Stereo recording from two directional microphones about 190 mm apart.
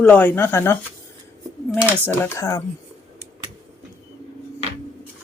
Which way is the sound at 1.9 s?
10° left (ahead or behind).